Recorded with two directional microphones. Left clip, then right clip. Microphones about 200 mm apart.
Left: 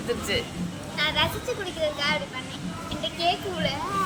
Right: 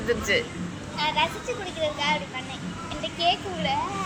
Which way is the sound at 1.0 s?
20° left (ahead or behind).